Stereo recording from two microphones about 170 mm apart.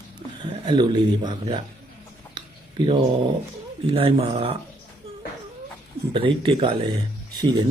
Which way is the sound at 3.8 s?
35° right (ahead or behind).